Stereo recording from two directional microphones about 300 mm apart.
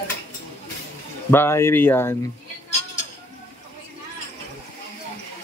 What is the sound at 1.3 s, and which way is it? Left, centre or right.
Speech, centre.